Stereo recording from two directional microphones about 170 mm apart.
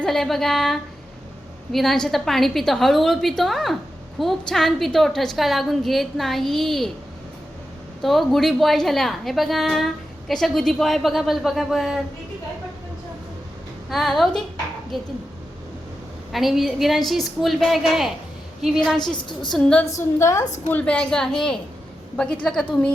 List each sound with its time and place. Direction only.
0.0 s a woman's voice: centre (ahead or behind)
8.0 s a woman's voice: centre (ahead or behind)
13.9 s a woman's voice: centre (ahead or behind)
16.3 s a woman's voice: centre (ahead or behind)
18.9 s a woman's voice: 25° left (ahead or behind)
19.5 s a woman's voice: 5° left (ahead or behind)
20.0 s a woman's voice: 15° left (ahead or behind)